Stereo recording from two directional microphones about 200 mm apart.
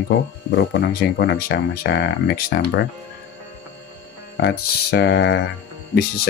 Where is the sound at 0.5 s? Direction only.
60° left (ahead or behind).